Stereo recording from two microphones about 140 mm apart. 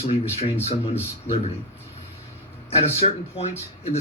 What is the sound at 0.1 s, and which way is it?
Speech, 45° left (ahead or behind).